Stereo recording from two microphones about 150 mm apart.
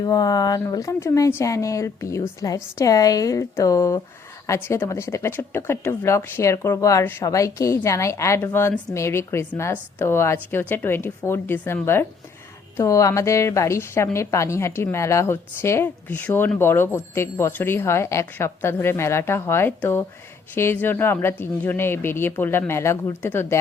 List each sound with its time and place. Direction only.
0.0 s speech: 25° left (ahead or behind)